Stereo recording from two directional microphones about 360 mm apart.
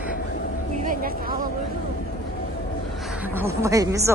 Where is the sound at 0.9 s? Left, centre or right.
Right.